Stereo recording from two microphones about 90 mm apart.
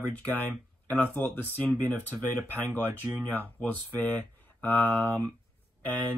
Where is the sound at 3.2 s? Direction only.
20° left (ahead or behind).